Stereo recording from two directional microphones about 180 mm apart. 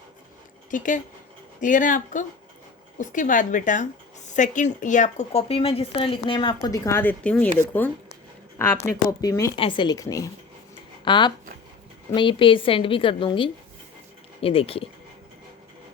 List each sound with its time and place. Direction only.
0.7 s speech: 45° left (ahead or behind); by 7.5 s 5° left (ahead or behind)
8.5 s speech: 15° left (ahead or behind)
9.6 s a woman's voice: 25° left (ahead or behind)